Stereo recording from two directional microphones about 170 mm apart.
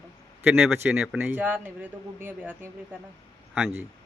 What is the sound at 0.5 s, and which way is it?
Speech, 5° right (ahead or behind).